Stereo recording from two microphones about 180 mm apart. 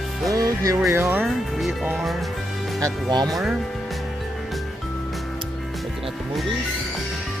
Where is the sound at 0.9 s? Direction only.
10° right (ahead or behind).